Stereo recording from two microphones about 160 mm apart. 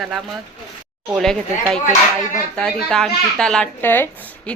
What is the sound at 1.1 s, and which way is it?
Speech, 5° left (ahead or behind).